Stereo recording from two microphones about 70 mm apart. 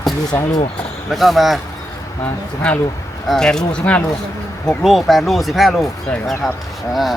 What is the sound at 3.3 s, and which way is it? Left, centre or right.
Speech, centre.